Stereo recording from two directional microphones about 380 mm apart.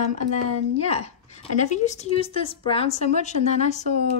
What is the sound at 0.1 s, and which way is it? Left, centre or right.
A woman's voice, centre.